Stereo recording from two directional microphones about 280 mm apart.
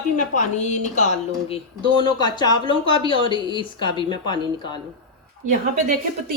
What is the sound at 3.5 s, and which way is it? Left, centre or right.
Speech, centre.